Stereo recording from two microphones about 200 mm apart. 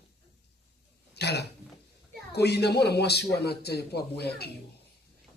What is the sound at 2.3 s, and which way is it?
A man's voice, 55° left (ahead or behind).